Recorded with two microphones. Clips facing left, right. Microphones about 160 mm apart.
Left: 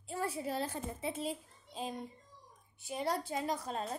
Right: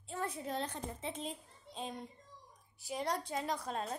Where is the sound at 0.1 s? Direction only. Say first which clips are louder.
Left 2 dB; 10° left (ahead or behind).